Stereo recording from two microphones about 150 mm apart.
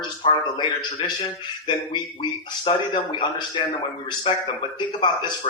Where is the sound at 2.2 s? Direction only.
30° left (ahead or behind).